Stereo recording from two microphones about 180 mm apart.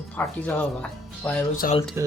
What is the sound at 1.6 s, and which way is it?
Speech, 50° left (ahead or behind).